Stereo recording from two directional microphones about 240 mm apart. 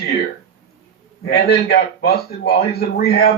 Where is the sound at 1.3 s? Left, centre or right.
Left.